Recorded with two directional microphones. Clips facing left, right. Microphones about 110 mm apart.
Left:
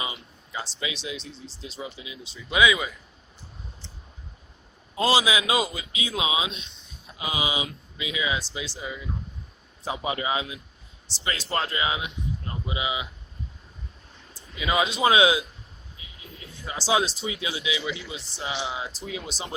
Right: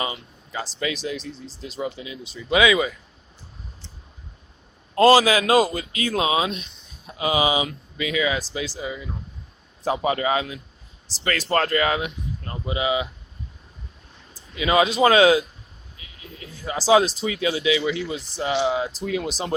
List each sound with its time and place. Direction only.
0.0 s a sound: 60° right (ahead or behind)
0.8 s speech: 50° right (ahead or behind); by 2.9 s 70° right (ahead or behind)
4.9 s speech: 55° right (ahead or behind)
7.2 s speech: 75° right (ahead or behind)
7.9 s speech: 60° right (ahead or behind)
8.5 s speech: 90° right
9.8 s speech: 45° right (ahead or behind)
14.6 s speech: 75° right (ahead or behind)
15.0 s speech: 50° right (ahead or behind)
16.7 s speech: 45° right (ahead or behind)
17.4 s speech: 60° right (ahead or behind)